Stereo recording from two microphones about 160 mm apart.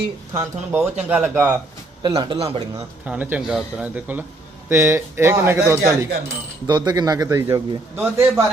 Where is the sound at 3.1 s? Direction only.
10° right (ahead or behind).